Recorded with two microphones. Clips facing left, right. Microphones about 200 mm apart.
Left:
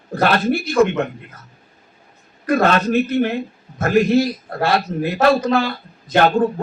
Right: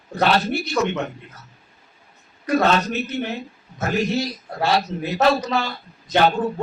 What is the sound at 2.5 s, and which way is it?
A man's voice, 55° left (ahead or behind).